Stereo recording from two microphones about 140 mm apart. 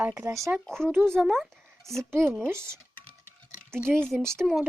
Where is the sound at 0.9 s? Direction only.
15° right (ahead or behind).